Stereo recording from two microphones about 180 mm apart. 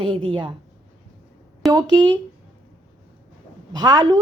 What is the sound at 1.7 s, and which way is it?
Speech, 25° right (ahead or behind).